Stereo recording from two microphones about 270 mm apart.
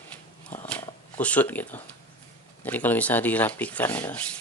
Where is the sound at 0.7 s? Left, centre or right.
Centre.